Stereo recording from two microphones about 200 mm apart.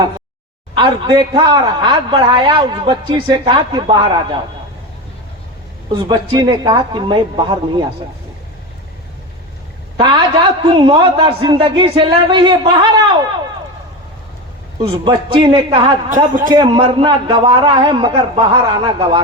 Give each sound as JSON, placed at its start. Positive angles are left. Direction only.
{"t": 0.8, "sound": "a man's voice", "side_deg": -20}
{"t": 5.9, "sound": "a man's voice", "side_deg": -20}
{"t": 10.6, "sound": "a man's voice", "side_deg": -20}
{"t": 14.8, "sound": "a man's voice", "side_deg": -25}
{"t": 16.0, "sound": "a man's voice", "side_deg": -40}
{"t": 16.5, "sound": "a man's voice", "side_deg": -20}